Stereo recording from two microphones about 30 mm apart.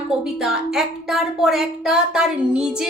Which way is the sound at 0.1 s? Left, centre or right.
Centre.